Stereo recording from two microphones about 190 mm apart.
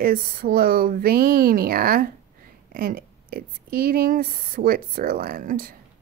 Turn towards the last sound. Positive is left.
turn(degrees=-45)  # may be behind; listen again after turning